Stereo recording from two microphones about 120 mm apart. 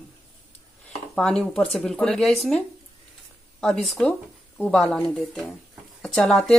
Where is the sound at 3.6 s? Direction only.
Centre (ahead or behind).